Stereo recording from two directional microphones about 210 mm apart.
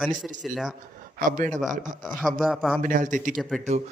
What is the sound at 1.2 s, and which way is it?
Speech, 40° right (ahead or behind).